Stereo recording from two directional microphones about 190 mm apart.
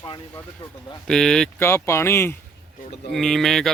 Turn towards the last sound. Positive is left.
turn(degrees=0)  # may be behind; listen again after turning